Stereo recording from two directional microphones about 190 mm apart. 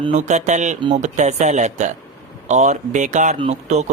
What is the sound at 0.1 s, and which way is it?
Speech, 40° right (ahead or behind).